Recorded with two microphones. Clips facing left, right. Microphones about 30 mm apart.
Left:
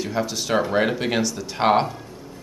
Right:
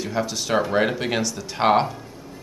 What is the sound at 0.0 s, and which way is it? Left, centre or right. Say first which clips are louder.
Speech: even; centre.